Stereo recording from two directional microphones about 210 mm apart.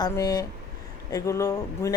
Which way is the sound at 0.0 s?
20° left (ahead or behind).